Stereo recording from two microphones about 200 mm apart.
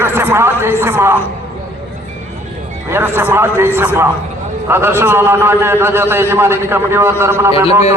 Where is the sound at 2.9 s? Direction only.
10° right (ahead or behind).